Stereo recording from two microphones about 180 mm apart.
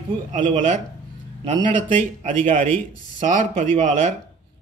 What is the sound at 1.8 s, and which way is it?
A man's voice, 40° right (ahead or behind).